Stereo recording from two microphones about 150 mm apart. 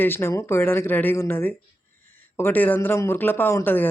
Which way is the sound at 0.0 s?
15° left (ahead or behind).